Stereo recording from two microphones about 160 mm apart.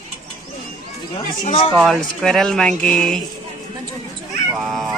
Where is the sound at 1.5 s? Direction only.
40° left (ahead or behind).